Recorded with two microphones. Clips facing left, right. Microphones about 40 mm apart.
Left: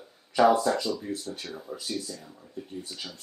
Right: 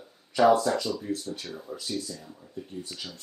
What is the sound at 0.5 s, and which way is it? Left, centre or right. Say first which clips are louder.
Speech: left 1 dB; left.